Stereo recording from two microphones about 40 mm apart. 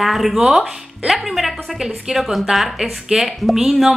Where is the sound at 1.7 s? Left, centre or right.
Centre.